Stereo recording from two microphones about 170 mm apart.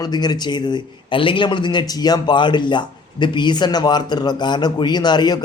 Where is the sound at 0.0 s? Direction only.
25° left (ahead or behind).